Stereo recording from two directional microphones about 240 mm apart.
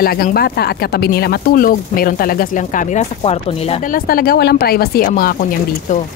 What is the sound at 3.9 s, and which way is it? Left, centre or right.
Speech, left.